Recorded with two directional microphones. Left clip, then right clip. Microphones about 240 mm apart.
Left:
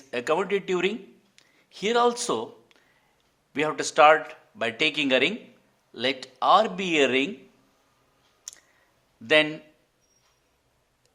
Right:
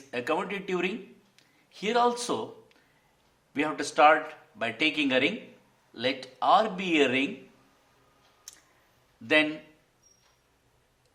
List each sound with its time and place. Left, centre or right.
0.1 s speech: left
8.5 s clicking: left
9.2 s speech: left